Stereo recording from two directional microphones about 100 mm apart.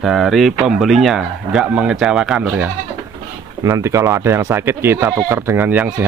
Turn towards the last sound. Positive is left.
turn(degrees=-20)  # may be behind; listen again after turning